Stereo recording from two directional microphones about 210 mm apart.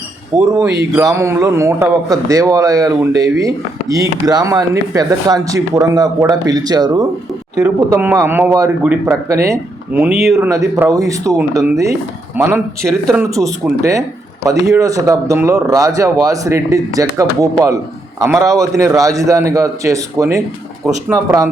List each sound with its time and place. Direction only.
0.3 s a man's voice: 5° right (ahead or behind)